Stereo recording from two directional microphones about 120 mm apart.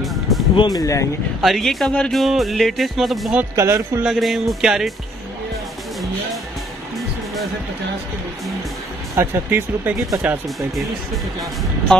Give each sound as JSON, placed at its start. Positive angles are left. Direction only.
{"t": 0.0, "sound": "music", "side_deg": 0}
{"t": 0.6, "sound": "speech", "side_deg": 30}
{"t": 1.4, "sound": "speech", "side_deg": 0}
{"t": 3.5, "sound": "speech", "side_deg": -25}
{"t": 4.0, "sound": "speech", "side_deg": 0}
{"t": 9.1, "sound": "speech", "side_deg": -20}